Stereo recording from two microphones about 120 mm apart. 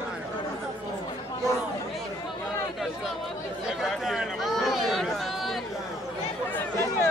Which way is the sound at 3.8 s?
5° right (ahead or behind).